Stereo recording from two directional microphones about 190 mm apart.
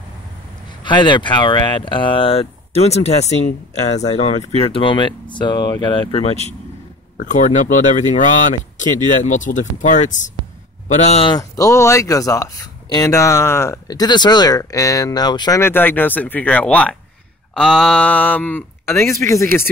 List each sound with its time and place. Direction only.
0.8 s speech: 25° left (ahead or behind)